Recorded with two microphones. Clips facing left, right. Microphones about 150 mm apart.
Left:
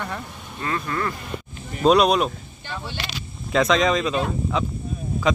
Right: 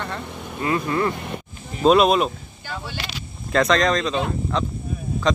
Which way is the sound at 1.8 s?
Centre (ahead or behind).